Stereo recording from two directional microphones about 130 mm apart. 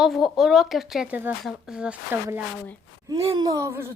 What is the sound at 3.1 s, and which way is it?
Speech, 30° right (ahead or behind).